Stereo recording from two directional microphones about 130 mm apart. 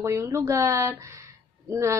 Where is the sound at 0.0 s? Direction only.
25° right (ahead or behind).